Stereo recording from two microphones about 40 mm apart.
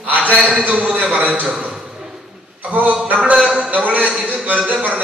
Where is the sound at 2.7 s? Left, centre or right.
Right.